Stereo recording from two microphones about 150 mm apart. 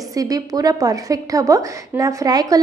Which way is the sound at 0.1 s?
25° right (ahead or behind).